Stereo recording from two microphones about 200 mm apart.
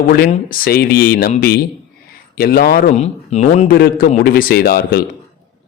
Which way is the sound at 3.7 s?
50° left (ahead or behind).